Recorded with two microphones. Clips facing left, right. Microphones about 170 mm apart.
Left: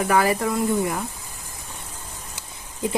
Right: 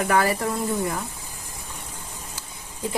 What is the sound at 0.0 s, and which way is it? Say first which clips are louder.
Speech: left 2 dB; 10° left (ahead or behind).